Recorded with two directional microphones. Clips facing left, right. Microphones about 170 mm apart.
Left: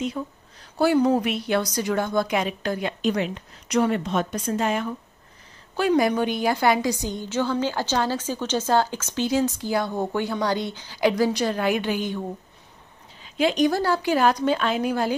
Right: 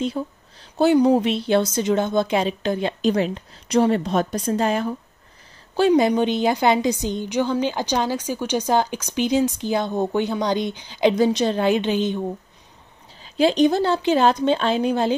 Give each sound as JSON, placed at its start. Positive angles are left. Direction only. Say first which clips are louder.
{"t": 0.0, "sound": "a woman's voice", "louder": "right 3 dB", "side_deg": -30}
{"t": 5.8, "sound": "a woman's voice", "louder": "right 4 dB", "side_deg": -25}
{"t": 13.2, "sound": "a woman's voice", "louder": "right 4 dB", "side_deg": -30}